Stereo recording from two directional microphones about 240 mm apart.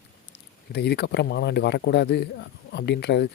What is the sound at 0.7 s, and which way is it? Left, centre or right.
Speech, left.